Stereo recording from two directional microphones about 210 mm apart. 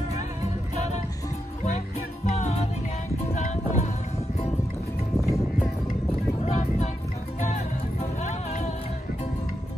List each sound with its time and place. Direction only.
2.2 s music: 35° left (ahead or behind)
6.4 s music: 30° left (ahead or behind)